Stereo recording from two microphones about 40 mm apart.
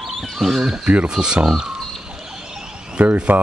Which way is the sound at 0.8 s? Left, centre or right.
Right.